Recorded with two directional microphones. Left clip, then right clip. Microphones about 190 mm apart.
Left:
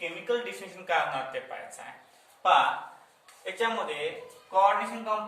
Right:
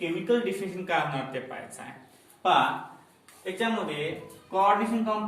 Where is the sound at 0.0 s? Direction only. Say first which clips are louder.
Right 4 dB; centre (ahead or behind).